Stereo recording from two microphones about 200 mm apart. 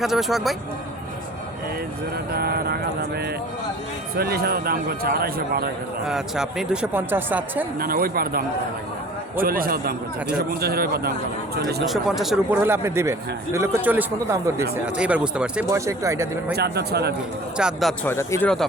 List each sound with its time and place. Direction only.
0.0 s speech: centre (ahead or behind)
2.3 s speech: 50° right (ahead or behind)
4.1 s speech: 50° right (ahead or behind)
6.1 s speech: centre (ahead or behind)
7.8 s speech: 50° right (ahead or behind)
11.9 s speech: centre (ahead or behind)
16.5 s speech: 55° right (ahead or behind)
17.6 s speech: centre (ahead or behind)
18.1 s speech: 15° left (ahead or behind)